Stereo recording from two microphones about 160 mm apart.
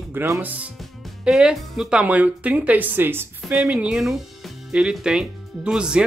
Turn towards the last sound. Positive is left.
turn(degrees=-5)  # may be behind; listen again after turning